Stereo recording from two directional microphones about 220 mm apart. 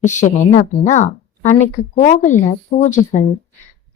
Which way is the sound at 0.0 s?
35° left (ahead or behind).